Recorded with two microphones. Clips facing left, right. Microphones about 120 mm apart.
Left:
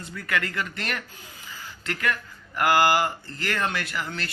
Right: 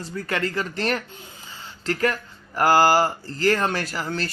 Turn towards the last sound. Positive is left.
turn(degrees=-35)  # may be behind; listen again after turning